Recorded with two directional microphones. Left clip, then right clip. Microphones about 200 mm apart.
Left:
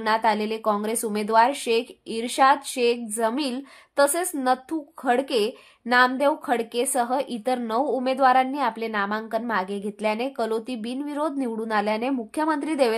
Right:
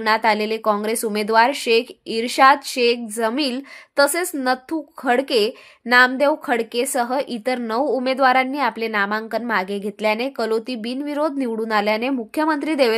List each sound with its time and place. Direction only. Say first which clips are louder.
0.0 s speech: right 4 dB; 15° right (ahead or behind)